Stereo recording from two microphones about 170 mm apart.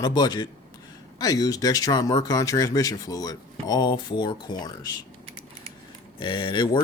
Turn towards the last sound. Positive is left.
turn(degrees=25)  # may be behind; listen again after turning